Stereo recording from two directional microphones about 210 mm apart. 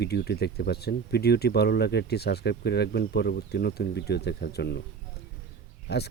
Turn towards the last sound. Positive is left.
turn(degrees=55)  # may be behind; listen again after turning